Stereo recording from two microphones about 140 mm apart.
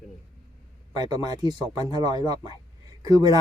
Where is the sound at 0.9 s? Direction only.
30° right (ahead or behind).